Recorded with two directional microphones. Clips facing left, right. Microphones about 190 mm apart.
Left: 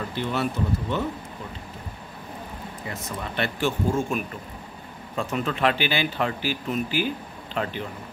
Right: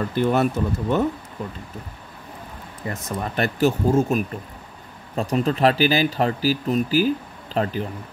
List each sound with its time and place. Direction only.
0.1 s speech: 50° right (ahead or behind)
2.9 s speech: 45° right (ahead or behind)